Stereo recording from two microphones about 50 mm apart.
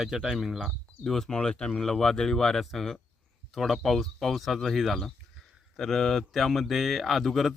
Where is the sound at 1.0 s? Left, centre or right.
Centre.